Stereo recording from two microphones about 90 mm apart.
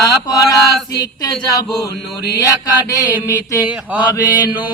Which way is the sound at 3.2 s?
35° left (ahead or behind).